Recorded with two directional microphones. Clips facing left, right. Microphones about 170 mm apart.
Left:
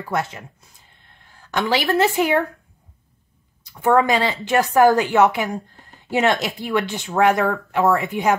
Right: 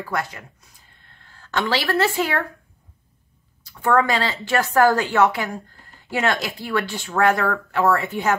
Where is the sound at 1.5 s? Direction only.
15° left (ahead or behind).